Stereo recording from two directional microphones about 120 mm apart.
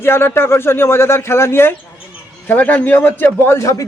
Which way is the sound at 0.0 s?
20° left (ahead or behind).